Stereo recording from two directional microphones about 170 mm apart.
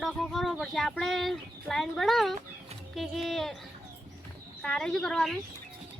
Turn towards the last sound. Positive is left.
turn(degrees=5)  # may be behind; listen again after turning